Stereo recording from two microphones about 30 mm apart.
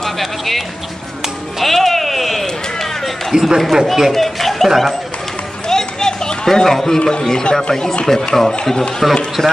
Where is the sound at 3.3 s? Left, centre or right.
Right.